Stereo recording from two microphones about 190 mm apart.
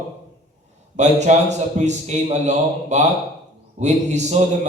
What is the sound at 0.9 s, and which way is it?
A man's voice, 35° right (ahead or behind).